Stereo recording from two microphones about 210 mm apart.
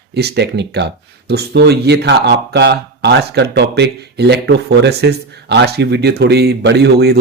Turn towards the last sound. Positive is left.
turn(degrees=-50)  # may be behind; listen again after turning